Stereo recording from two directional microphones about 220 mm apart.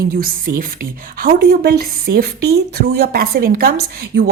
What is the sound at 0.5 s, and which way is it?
Speech, 45° right (ahead or behind).